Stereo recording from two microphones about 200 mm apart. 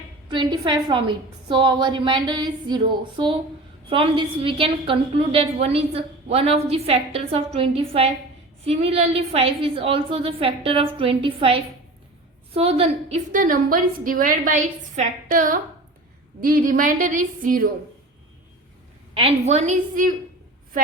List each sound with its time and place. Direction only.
0.3 s a woman's voice: 25° right (ahead or behind); by 17.7 s 40° right (ahead or behind)
19.1 s a woman's voice: 30° right (ahead or behind)